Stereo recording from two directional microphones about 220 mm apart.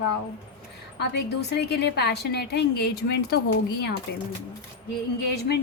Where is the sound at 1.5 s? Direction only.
50° left (ahead or behind).